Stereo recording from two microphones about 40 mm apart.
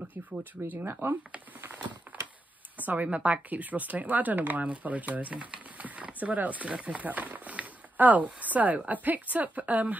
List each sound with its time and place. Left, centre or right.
0.1 s a woman's voice: right
2.1 s a sound: right
2.8 s a woman's voice: right
3.1 s speech: right
5.8 s a sound: right
8.8 s a woman's voice: right